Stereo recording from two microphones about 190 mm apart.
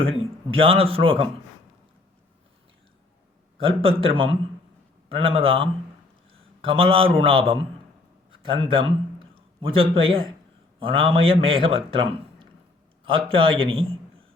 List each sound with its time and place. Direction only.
0.0 s a man's voice: 30° right (ahead or behind)
3.6 s a man's voice: 30° right (ahead or behind)